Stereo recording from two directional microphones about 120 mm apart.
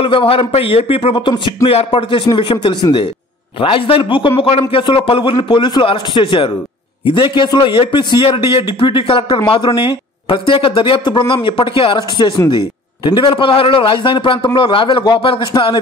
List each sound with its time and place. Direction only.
0.0 s a man's voice: 45° left (ahead or behind)